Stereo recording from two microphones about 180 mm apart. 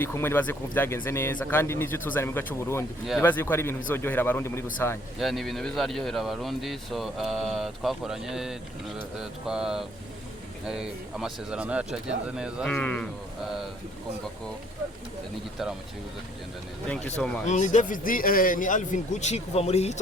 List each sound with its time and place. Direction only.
0.0 s speech: 15° left (ahead or behind)
5.2 s speech: centre (ahead or behind)
12.6 s speech: 10° left (ahead or behind)
16.9 s speech: 5° left (ahead or behind)
17.4 s a man's voice: 40° left (ahead or behind)